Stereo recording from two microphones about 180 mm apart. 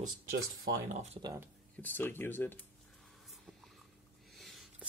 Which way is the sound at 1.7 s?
10° left (ahead or behind).